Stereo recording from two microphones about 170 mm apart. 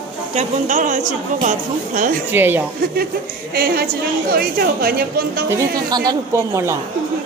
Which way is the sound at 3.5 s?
65° right (ahead or behind).